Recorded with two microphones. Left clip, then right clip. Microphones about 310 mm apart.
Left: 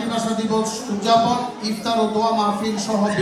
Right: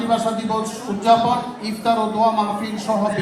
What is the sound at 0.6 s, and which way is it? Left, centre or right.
Speech, right.